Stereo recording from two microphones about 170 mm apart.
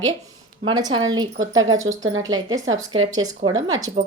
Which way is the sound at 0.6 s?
25° right (ahead or behind).